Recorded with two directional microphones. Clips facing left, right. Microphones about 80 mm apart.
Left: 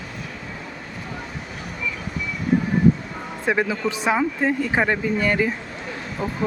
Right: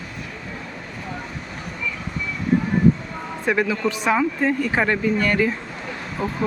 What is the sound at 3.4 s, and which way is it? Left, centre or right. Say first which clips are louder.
A woman's voice: right 1 dB; centre.